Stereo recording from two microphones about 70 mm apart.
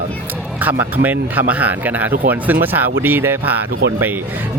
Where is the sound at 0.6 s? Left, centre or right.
Right.